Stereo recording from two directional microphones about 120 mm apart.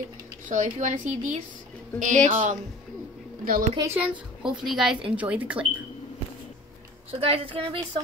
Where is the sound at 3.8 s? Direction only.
15° right (ahead or behind).